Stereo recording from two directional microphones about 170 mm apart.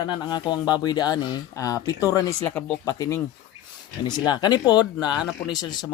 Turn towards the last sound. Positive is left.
turn(degrees=25)  # may be behind; listen again after turning